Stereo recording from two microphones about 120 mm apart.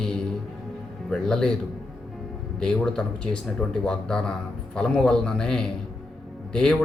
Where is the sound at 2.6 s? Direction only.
5° left (ahead or behind).